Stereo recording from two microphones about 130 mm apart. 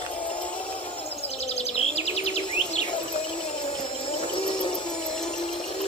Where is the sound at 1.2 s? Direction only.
55° left (ahead or behind).